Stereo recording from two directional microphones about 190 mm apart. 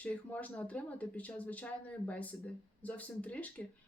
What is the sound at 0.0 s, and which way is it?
Speech, 10° left (ahead or behind).